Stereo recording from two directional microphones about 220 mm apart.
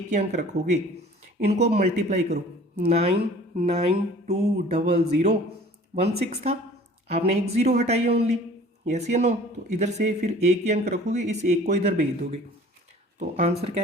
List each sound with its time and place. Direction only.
0.1 s speech: 30° right (ahead or behind)